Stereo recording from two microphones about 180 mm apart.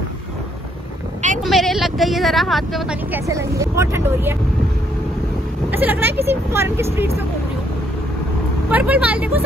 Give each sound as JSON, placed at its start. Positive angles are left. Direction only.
{"t": 1.4, "sound": "speech", "side_deg": 0}
{"t": 3.3, "sound": "speech", "side_deg": -15}
{"t": 5.7, "sound": "speech", "side_deg": -10}
{"t": 8.6, "sound": "speech", "side_deg": -10}